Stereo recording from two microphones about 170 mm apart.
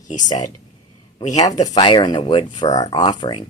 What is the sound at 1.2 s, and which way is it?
Speech, 45° left (ahead or behind).